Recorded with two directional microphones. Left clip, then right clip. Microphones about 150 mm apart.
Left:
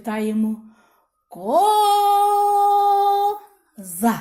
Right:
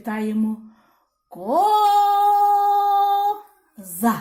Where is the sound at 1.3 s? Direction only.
30° left (ahead or behind).